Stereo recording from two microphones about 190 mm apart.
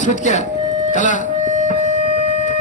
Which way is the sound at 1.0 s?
40° left (ahead or behind).